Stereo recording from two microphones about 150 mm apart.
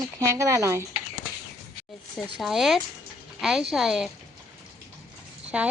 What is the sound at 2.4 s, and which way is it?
A woman's voice, centre (ahead or behind).